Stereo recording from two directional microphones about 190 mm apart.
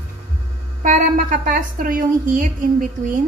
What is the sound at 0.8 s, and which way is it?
A woman's voice, 45° right (ahead or behind).